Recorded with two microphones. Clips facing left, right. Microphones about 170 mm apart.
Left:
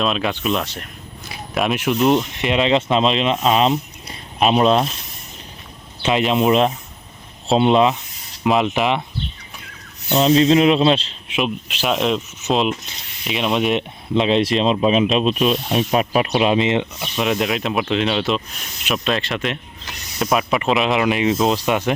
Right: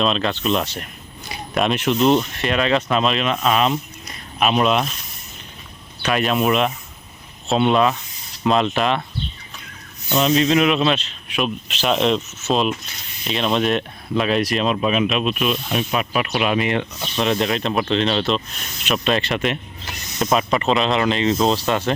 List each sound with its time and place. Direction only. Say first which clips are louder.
0.0 s speech: even; 5° left (ahead or behind)
0.5 s speech: right 1 dB; centre (ahead or behind); by 4.9 s 30° left (ahead or behind)
6.0 s speech: left 2 dB; 20° left (ahead or behind)
10.1 s speech: left 3 dB; 30° left (ahead or behind); by 12.2 s 5° left (ahead or behind)
12.4 s speech: left 1 dB; 15° left (ahead or behind); by 16.3 s 35° left (ahead or behind)
16.3 s speech: left 2 dB; 25° left (ahead or behind)
17.0 s speech: even; 5° left (ahead or behind)